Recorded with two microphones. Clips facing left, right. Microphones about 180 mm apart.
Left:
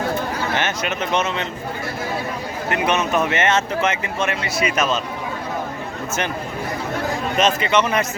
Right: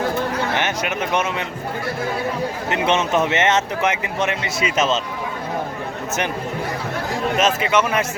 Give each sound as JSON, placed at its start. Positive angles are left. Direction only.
{"t": 0.5, "sound": "speech", "side_deg": -15}
{"t": 2.6, "sound": "speech", "side_deg": -25}
{"t": 7.3, "sound": "a man's voice", "side_deg": -5}